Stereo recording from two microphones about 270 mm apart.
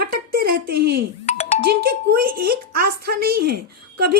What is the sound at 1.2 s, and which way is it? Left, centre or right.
Music, left.